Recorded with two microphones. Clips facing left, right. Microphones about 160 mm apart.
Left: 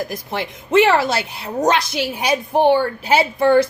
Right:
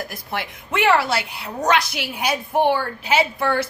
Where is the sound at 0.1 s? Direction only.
25° left (ahead or behind).